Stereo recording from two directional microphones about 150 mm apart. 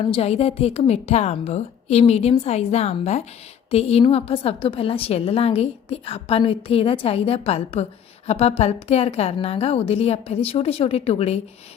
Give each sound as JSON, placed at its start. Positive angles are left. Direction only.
{"t": 0.0, "sound": "a woman's voice", "side_deg": 40}